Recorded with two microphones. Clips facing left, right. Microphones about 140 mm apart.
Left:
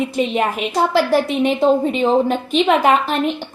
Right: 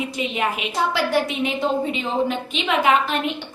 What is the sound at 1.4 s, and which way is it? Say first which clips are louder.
A woman's voice: left 7 dB; 40° left (ahead or behind).